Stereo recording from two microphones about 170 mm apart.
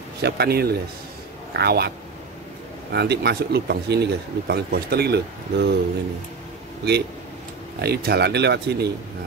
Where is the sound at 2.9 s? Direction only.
80° right.